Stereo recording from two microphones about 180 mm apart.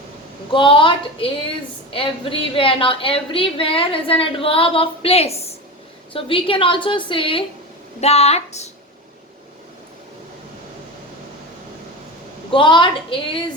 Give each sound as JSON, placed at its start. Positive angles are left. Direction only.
{"t": 0.5, "sound": "a woman's voice", "side_deg": 30}
{"t": 12.5, "sound": "a woman's voice", "side_deg": 30}